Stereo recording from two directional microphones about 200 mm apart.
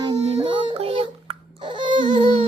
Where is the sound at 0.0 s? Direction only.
25° right (ahead or behind).